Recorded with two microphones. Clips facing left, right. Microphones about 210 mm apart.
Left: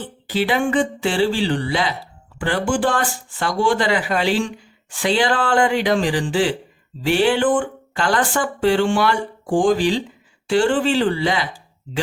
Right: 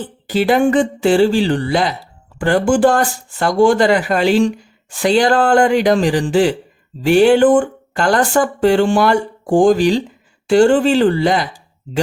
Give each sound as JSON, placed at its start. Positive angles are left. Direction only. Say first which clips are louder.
{"t": 0.3, "sound": "speech", "louder": "right 6 dB", "side_deg": -45}